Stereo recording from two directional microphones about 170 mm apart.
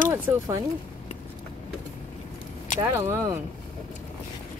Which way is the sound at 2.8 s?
15° right (ahead or behind).